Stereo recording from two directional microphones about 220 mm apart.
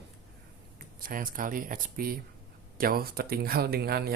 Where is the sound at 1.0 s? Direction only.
40° right (ahead or behind).